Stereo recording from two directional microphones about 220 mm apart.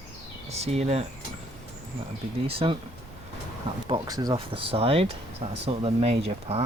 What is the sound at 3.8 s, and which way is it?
Speech, 20° right (ahead or behind).